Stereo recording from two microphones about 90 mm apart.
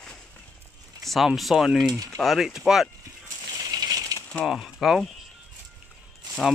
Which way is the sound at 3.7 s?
45° right (ahead or behind).